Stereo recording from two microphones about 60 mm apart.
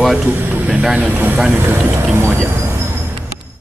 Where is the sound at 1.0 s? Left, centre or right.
Right.